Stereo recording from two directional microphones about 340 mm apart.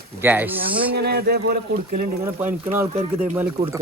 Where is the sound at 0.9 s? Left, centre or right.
Right.